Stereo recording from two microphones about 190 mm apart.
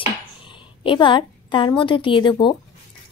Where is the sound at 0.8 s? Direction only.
25° left (ahead or behind).